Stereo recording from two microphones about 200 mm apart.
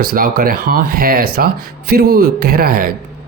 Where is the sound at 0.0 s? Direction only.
45° right (ahead or behind).